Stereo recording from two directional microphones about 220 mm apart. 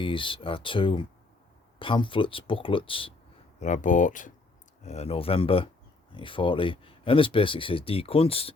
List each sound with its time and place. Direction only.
0.0 s speech: 25° left (ahead or behind)
3.6 s speech: 35° left (ahead or behind)